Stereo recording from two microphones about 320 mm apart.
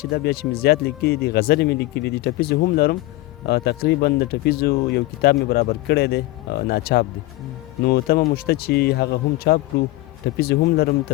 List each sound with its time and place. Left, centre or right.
0.0 s speech: left